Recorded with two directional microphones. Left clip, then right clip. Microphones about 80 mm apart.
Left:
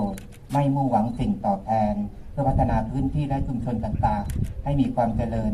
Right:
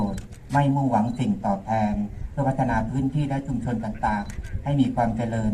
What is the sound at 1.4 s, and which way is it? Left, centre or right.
A man's voice, centre.